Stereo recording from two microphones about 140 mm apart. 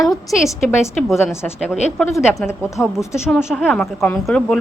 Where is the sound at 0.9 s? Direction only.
Centre (ahead or behind).